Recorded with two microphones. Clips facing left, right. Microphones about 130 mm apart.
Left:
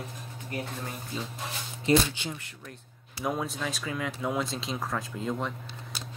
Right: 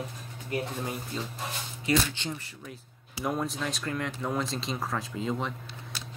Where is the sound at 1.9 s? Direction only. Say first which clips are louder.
Left 3 dB; 25° left (ahead or behind).